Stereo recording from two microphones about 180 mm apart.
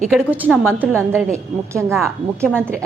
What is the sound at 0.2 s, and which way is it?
A woman's voice, 10° right (ahead or behind).